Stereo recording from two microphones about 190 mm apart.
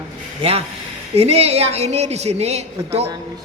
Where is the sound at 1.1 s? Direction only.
30° right (ahead or behind).